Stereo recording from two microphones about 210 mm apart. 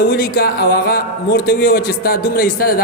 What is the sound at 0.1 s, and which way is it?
A man's voice, 45° left (ahead or behind).